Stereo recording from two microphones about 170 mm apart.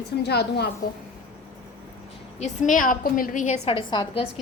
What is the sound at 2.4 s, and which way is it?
A woman's voice, 45° left (ahead or behind).